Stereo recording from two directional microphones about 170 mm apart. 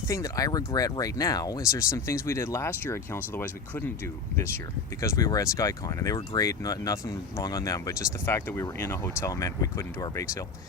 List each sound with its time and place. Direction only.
0.1 s speech: 20° left (ahead or behind)